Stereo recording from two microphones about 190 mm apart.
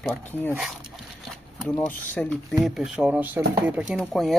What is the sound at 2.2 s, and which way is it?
Speech, 5° left (ahead or behind).